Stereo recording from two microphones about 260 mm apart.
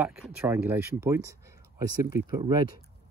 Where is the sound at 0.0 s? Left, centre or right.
Centre.